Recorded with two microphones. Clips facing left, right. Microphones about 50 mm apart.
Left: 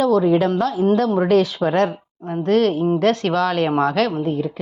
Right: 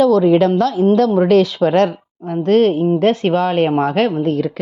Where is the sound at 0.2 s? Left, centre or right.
Right.